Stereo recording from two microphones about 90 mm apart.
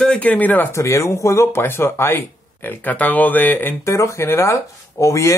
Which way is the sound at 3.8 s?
35° left (ahead or behind).